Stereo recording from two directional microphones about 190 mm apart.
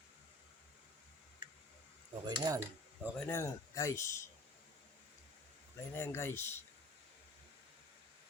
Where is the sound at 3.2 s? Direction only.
15° left (ahead or behind).